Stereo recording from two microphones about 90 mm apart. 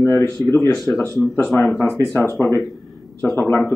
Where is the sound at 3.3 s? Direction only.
20° left (ahead or behind).